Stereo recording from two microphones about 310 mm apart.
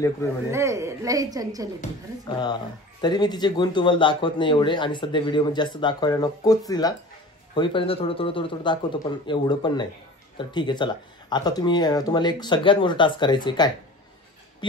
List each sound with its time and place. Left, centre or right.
0.5 s a woman's voice: centre
1.8 s speech: centre